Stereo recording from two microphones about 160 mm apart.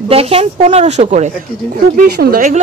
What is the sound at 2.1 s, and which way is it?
Speech, 75° right (ahead or behind).